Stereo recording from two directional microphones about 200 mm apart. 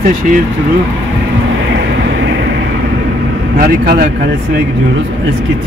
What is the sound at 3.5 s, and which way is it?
Speech, 50° right (ahead or behind).